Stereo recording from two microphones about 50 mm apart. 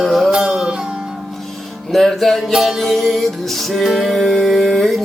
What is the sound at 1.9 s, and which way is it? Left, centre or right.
Music, centre.